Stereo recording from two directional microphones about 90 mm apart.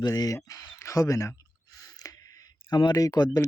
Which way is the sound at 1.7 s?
40° left (ahead or behind).